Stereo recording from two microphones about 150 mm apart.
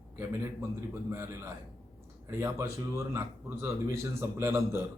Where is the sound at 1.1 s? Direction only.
15° right (ahead or behind).